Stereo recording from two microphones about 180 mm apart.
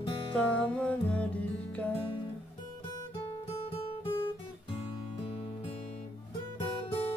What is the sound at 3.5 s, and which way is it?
Music, 35° left (ahead or behind).